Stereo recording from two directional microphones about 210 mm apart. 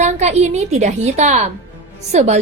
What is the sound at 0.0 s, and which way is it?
Speech, 30° right (ahead or behind).